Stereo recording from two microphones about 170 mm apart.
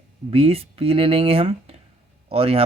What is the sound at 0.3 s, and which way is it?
Speech, 35° right (ahead or behind).